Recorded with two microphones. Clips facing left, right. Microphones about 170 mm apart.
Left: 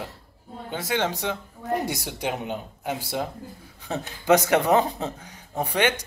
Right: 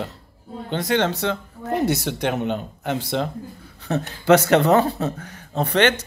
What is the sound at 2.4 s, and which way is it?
Speech, 70° right (ahead or behind).